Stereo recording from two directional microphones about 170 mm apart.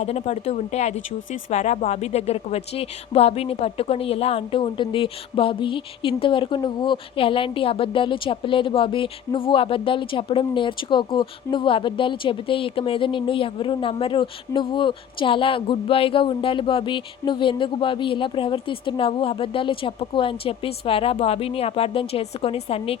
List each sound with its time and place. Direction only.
0.0 s a woman's voice: 40° left (ahead or behind)